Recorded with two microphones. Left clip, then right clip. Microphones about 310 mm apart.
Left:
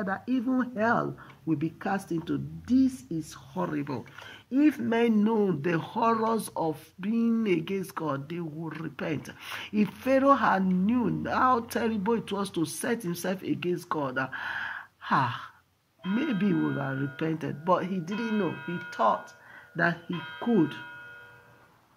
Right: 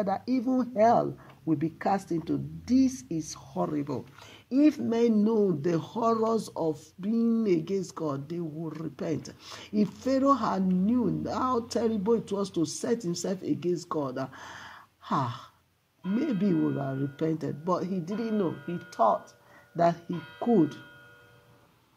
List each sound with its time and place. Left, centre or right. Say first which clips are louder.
0.5 s speech: right 4 dB; right
3.5 s speech: right 1 dB; centre